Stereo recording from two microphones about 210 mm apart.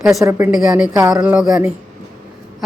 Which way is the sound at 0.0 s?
Centre (ahead or behind).